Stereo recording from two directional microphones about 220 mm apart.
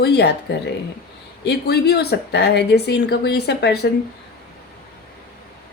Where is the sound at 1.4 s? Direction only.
45° left (ahead or behind).